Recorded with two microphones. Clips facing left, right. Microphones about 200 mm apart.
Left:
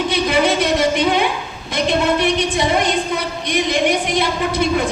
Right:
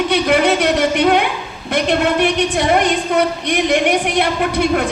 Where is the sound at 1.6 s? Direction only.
65° right (ahead or behind).